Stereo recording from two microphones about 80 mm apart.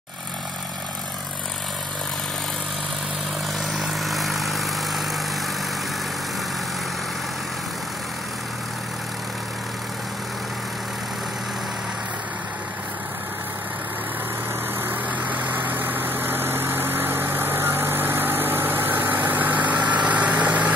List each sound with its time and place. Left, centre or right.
3.7 s vehicle: centre
14.9 s vehicle: right